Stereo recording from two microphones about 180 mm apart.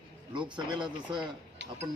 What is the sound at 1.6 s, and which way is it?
Speech, 85° right.